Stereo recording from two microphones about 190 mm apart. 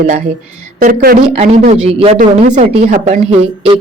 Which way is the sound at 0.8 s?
45° right (ahead or behind).